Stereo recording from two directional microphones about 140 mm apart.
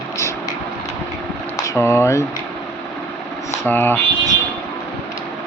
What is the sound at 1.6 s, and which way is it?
Speech, 20° left (ahead or behind).